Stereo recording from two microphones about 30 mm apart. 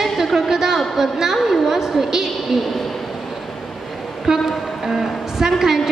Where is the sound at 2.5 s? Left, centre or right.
Centre.